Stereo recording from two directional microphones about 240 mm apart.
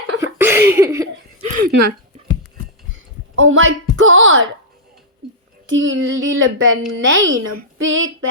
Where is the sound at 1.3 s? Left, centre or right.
Right.